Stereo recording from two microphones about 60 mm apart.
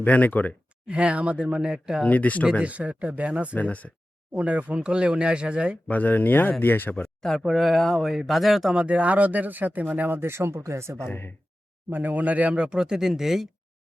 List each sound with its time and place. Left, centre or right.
0.0 s speech: left
0.9 s speech: centre
2.0 s speech: left
2.6 s speech: right
3.5 s speech: left
4.4 s speech: right
5.9 s speech: left
6.9 s speech: centre
7.3 s speech: centre
8.7 s speech: centre; by 11.0 s right
11.9 s speech: right
12.5 s speech: centre